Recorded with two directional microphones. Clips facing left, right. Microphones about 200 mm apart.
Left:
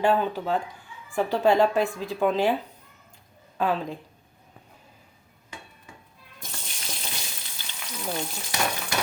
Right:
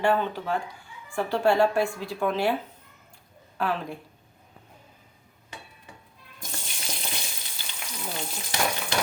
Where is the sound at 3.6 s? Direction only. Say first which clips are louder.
Left 3 dB; 20° left (ahead or behind).